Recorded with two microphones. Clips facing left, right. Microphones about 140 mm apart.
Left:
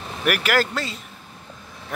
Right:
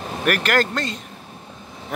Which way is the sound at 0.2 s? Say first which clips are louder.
Right 1 dB; 10° left (ahead or behind).